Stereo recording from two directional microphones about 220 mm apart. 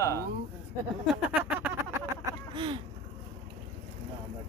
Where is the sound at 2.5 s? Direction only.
20° right (ahead or behind).